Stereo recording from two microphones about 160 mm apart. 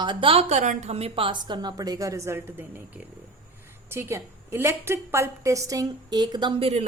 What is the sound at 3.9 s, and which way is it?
A woman's voice, 15° right (ahead or behind).